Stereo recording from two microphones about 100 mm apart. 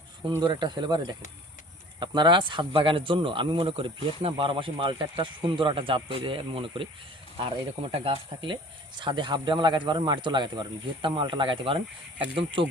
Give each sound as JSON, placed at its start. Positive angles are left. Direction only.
{"t": 0.2, "sound": "speech", "side_deg": -55}